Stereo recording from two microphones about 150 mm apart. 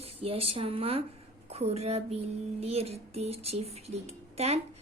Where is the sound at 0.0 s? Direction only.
40° right (ahead or behind).